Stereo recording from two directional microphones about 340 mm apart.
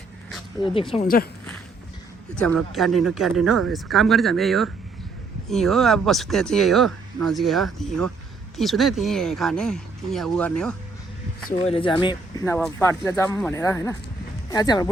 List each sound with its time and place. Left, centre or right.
0.6 s speech: centre
2.3 s speech: centre
11.5 s speech: centre